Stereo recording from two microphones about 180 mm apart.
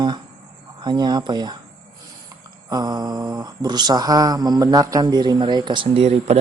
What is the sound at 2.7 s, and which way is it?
Mantra, 20° right (ahead or behind).